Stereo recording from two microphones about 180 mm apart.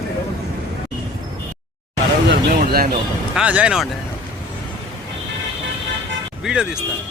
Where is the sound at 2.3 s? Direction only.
60° right (ahead or behind).